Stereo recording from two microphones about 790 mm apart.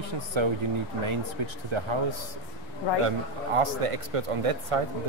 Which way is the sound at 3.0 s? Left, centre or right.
Right.